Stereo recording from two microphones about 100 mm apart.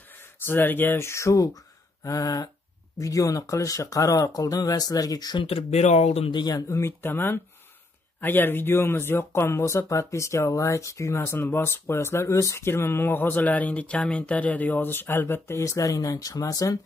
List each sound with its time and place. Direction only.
0.4 s speech: 20° left (ahead or behind); by 5.4 s 40° left (ahead or behind)
5.4 s speech: 65° left (ahead or behind); by 6.3 s 85° left
6.3 s speech: 45° left (ahead or behind)
6.7 s speech: 25° left (ahead or behind)